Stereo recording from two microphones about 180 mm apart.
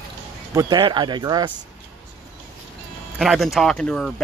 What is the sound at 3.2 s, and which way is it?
Speech, centre (ahead or behind).